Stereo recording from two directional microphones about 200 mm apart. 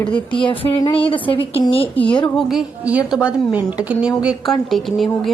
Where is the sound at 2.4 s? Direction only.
Centre (ahead or behind).